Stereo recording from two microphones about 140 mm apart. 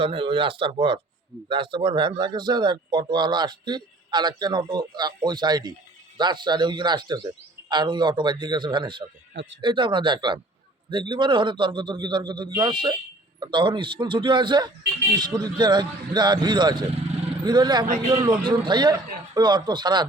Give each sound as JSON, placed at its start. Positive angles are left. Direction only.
{"t": 0.0, "sound": "speech", "side_deg": -40}